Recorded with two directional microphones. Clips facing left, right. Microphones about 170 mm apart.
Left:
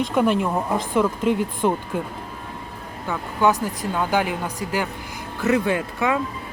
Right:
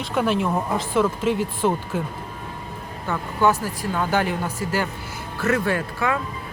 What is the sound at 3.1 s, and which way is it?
Speech, 15° left (ahead or behind).